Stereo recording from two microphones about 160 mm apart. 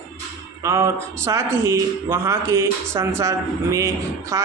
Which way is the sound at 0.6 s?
15° right (ahead or behind).